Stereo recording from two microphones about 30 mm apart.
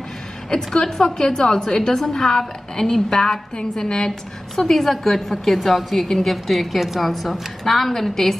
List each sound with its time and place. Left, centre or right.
0.7 s a woman's voice: centre
4.6 s a woman's voice: centre
6.0 s a woman's voice: centre
6.3 s a woman's voice: centre